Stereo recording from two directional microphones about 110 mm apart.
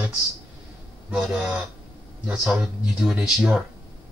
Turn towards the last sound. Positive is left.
turn(degrees=-5)  # may be behind; listen again after turning